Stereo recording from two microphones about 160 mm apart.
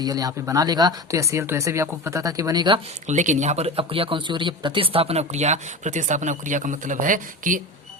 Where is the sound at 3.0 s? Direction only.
50° right (ahead or behind).